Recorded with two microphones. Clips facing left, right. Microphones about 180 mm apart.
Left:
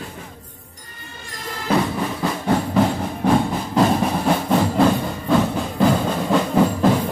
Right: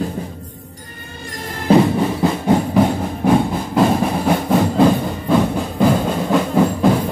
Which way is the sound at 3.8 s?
10° right (ahead or behind).